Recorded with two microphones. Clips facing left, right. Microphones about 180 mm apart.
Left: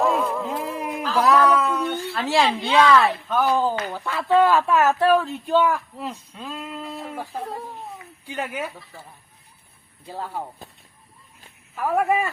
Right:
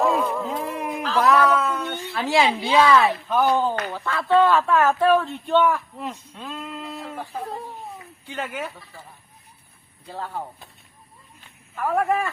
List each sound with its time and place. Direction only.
0.0 s a sound: centre (ahead or behind)
1.4 s speech: 10° left (ahead or behind)
3.9 s speech: 10° left (ahead or behind)
10.1 s speech: 10° left (ahead or behind)
11.8 s speech: 10° left (ahead or behind)